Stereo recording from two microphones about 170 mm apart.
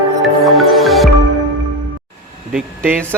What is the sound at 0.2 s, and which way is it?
Music, centre (ahead or behind).